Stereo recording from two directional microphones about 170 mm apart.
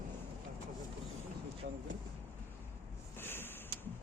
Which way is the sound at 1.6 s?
75° right (ahead or behind).